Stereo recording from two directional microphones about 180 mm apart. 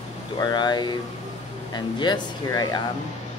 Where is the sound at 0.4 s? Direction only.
25° left (ahead or behind).